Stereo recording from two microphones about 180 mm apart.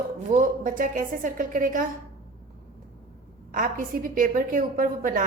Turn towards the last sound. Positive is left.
turn(degrees=-50)  # may be behind; listen again after turning